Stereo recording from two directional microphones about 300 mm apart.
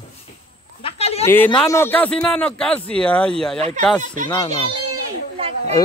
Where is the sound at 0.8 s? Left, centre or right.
Centre.